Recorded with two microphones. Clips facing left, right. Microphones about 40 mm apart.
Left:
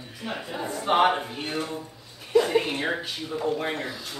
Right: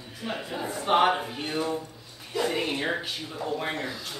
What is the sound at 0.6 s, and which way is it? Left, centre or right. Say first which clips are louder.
Speech: left 2 dB; centre.